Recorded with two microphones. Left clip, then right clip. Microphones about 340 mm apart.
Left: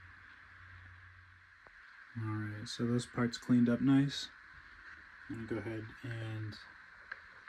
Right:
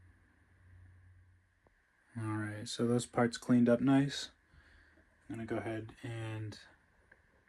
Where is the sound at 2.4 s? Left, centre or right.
Centre.